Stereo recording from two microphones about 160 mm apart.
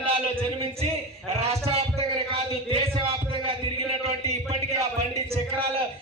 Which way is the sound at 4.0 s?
40° right (ahead or behind).